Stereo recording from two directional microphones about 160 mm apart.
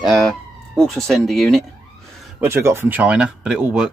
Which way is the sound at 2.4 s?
15° right (ahead or behind).